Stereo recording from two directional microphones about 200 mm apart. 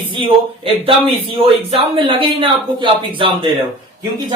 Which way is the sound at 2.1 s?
25° right (ahead or behind).